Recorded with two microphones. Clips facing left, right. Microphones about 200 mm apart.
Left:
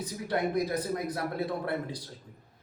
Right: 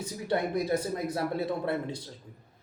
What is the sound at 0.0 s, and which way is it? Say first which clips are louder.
A man's voice: right 1 dB; 25° right (ahead or behind).